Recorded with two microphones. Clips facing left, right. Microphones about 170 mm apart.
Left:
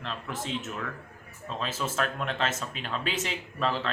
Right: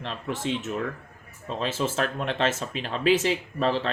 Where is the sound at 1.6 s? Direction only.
30° right (ahead or behind).